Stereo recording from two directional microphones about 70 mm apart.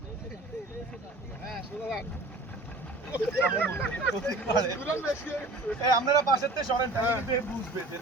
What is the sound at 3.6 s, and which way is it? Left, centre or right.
Speech, left.